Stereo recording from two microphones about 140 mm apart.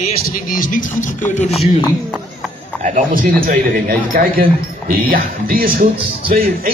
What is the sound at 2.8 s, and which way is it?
A man's voice, 70° right (ahead or behind).